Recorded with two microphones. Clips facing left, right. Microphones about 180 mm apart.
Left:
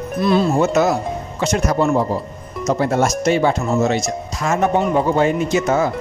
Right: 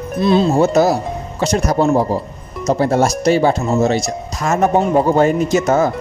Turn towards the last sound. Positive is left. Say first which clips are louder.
# right 3 dB
turn(degrees=-40)  # may be behind; listen again after turning